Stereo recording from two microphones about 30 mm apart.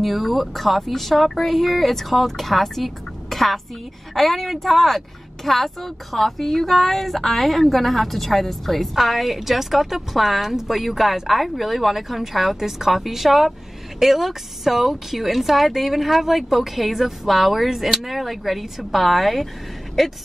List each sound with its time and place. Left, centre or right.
0.0 s a woman's voice: centre